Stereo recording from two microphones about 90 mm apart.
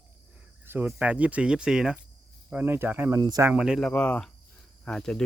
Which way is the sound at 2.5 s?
25° right (ahead or behind).